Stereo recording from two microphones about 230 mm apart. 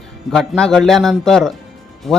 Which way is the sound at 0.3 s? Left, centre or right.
Centre.